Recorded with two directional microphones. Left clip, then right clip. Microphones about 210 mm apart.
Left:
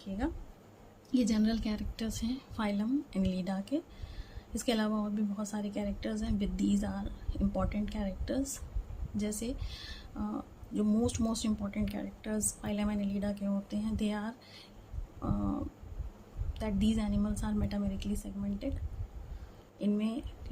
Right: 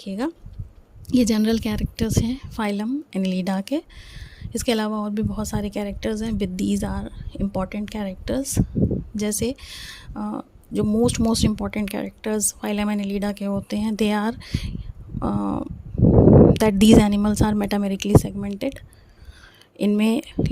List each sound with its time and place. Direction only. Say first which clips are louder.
1.1 s speech: right 11 dB; 50° right (ahead or behind)
19.8 s speech: right 14 dB; 50° right (ahead or behind)